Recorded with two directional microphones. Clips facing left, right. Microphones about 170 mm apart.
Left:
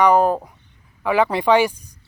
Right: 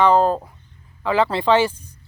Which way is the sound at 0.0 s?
15° left (ahead or behind).